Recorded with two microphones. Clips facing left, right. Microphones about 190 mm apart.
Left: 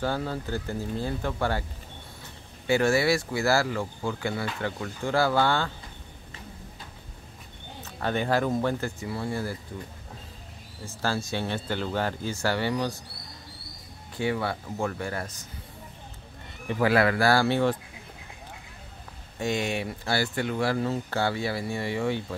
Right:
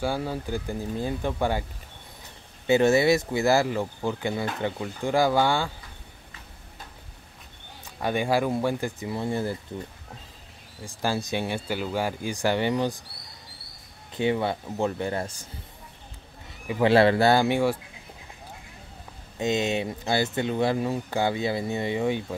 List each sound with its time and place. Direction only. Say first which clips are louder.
0.0 s speech: right 1 dB; 10° right (ahead or behind)
8.0 s speech: right 1 dB; 10° right (ahead or behind)
10.9 s speech: right 2 dB; 15° right (ahead or behind)
14.1 s speech: right 3 dB; 20° right (ahead or behind)
16.8 s speech: right 4 dB; 25° right (ahead or behind); by 17.7 s 10° right (ahead or behind)
19.3 s speech: right 3 dB; 20° right (ahead or behind)